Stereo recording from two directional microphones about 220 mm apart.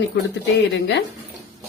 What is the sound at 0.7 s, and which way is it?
Speech, 50° left (ahead or behind).